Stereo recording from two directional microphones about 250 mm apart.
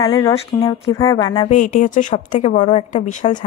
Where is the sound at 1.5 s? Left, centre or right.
Left.